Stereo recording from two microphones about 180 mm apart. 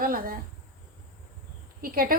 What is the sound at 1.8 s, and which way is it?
Speech, 55° right (ahead or behind).